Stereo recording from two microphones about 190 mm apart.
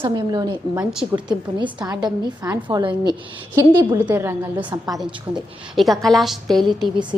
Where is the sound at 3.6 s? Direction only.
10° right (ahead or behind).